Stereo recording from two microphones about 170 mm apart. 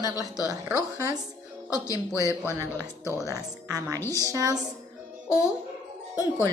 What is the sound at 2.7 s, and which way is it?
Speech, 15° left (ahead or behind).